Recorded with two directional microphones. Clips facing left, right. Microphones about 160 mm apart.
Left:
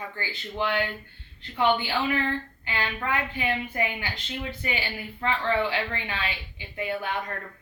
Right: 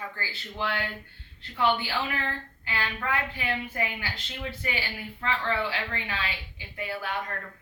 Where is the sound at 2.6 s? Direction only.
20° left (ahead or behind).